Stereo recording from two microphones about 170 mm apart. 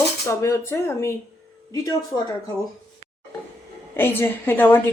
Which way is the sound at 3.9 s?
15° left (ahead or behind).